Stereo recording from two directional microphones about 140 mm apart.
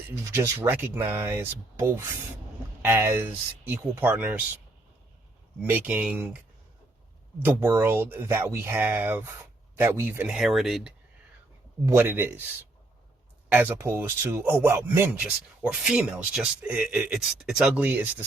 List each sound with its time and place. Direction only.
0.1 s speech: 20° right (ahead or behind)
2.8 s speech: 15° right (ahead or behind)
5.6 s speech: 10° right (ahead or behind)
7.4 s speech: 15° right (ahead or behind)
11.9 s speech: 15° right (ahead or behind)
13.5 s speech: 15° right (ahead or behind)